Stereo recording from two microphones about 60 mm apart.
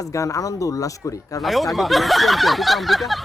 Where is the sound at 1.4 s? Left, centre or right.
Centre.